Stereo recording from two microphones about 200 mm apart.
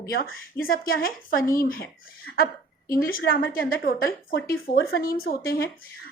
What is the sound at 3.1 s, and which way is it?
A woman's voice, 50° left (ahead or behind).